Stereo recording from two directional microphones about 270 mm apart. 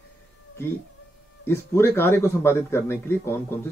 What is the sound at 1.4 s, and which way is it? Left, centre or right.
Speech, centre.